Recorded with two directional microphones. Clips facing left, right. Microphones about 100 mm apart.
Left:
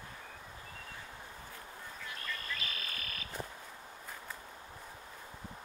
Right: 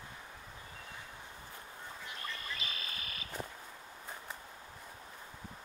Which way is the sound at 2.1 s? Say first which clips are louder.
Left 2 dB; 20° right (ahead or behind).